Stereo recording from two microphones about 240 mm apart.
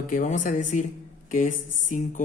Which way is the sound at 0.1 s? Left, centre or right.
Left.